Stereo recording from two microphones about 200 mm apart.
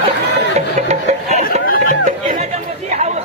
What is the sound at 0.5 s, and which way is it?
Music, 35° right (ahead or behind).